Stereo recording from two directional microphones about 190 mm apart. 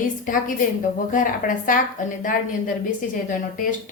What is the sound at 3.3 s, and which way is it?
Speech, 45° left (ahead or behind).